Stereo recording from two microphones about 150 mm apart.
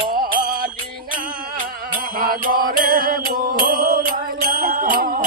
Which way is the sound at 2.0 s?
70° right (ahead or behind).